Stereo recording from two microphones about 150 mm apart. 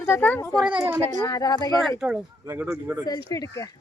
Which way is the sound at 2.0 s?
5° right (ahead or behind).